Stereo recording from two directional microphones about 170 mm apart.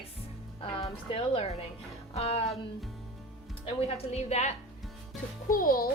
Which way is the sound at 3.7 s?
40° left (ahead or behind).